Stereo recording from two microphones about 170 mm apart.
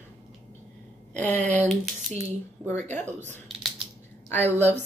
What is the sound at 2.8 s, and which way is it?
Speech, 45° right (ahead or behind).